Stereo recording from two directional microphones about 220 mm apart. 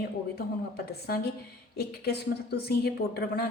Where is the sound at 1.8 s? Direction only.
45° left (ahead or behind).